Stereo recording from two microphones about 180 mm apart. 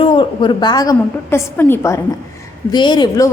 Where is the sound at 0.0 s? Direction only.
25° left (ahead or behind).